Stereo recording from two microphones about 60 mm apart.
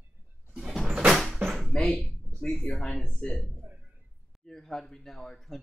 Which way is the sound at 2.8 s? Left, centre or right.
Centre.